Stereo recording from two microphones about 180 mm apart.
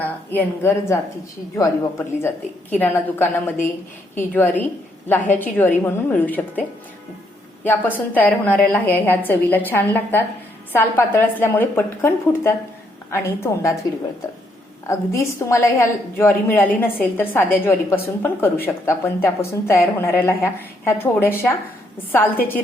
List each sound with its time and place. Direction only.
0.0 s speech: 10° left (ahead or behind)
14.8 s speech: 15° left (ahead or behind)